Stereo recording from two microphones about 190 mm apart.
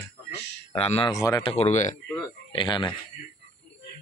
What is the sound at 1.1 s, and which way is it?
Speech, 15° left (ahead or behind).